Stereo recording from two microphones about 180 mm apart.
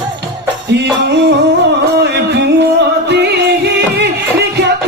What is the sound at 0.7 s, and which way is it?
Music, 70° right (ahead or behind).